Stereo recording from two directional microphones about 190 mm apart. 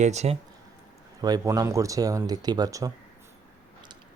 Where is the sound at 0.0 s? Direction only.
35° right (ahead or behind).